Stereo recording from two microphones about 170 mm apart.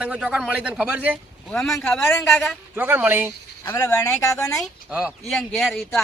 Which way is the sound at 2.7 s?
10° right (ahead or behind).